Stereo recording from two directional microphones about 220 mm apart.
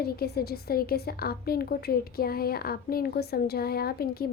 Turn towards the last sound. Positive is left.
turn(degrees=45)  # may be behind; listen again after turning